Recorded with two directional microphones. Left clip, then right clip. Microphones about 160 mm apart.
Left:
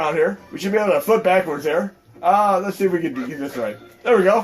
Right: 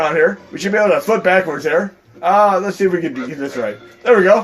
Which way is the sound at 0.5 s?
35° right (ahead or behind).